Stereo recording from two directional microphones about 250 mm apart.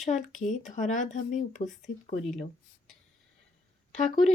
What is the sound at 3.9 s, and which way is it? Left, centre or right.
Speech, left.